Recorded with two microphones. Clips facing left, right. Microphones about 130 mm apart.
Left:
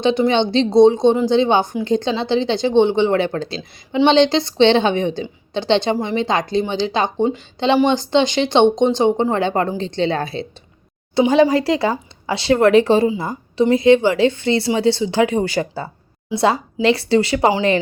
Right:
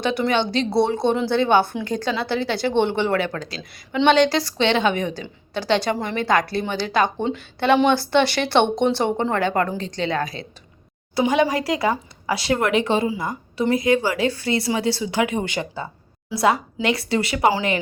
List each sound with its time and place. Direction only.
0.0 s speech: 20° left (ahead or behind)